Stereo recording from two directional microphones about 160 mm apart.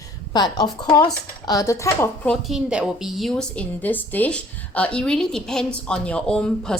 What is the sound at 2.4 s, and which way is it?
A woman's voice, 5° right (ahead or behind).